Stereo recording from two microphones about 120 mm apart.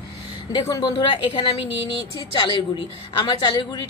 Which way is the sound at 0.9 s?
45° left (ahead or behind).